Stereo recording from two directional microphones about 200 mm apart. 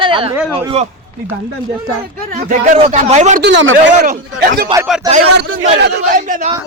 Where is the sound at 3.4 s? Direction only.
60° right (ahead or behind).